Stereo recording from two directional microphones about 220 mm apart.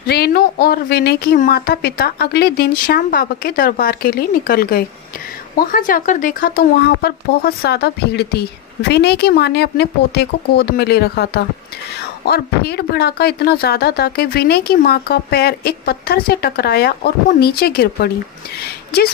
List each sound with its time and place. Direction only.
0.1 s speech: 45° left (ahead or behind)